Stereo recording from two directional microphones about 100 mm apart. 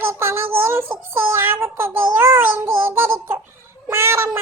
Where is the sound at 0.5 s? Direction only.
25° right (ahead or behind).